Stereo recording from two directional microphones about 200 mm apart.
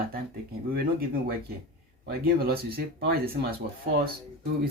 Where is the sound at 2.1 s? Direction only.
50° right (ahead or behind).